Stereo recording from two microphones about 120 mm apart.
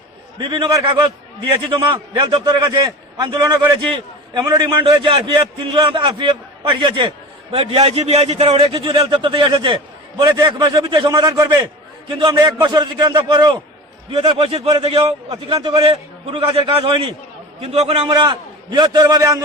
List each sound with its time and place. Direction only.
0.3 s a man's voice: 40° right (ahead or behind)
4.4 s a man's voice: 40° right (ahead or behind)
11.2 s a man's voice: 30° right (ahead or behind)
12.0 s a man's voice: 40° right (ahead or behind)
14.1 s a man's voice: 55° right (ahead or behind)
15.4 s a man's voice: 40° right (ahead or behind)
18.1 s a man's voice: 40° right (ahead or behind)